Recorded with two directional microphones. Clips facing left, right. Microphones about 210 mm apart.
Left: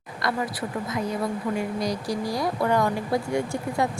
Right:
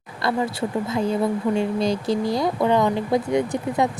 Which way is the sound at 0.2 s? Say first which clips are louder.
Right 5 dB; 25° right (ahead or behind).